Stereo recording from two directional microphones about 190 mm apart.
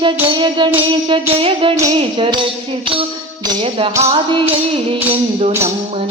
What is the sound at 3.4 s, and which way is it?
Music, 25° right (ahead or behind).